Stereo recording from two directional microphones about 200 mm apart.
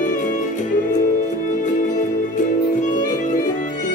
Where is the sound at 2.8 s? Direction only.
40° left (ahead or behind).